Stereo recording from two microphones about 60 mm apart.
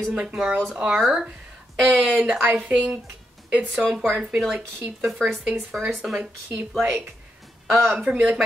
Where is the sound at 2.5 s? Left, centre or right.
Right.